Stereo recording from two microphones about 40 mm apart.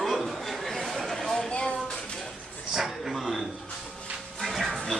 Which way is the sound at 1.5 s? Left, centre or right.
Left.